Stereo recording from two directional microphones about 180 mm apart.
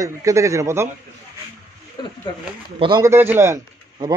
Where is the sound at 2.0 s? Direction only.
25° left (ahead or behind).